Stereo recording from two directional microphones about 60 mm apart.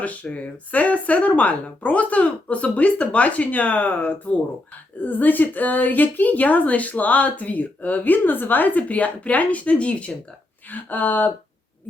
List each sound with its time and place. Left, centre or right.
0.0 s a woman's voice: left